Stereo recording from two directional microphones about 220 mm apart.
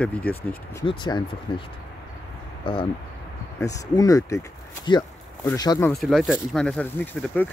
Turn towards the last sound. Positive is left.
turn(degrees=5)  # may be behind; listen again after turning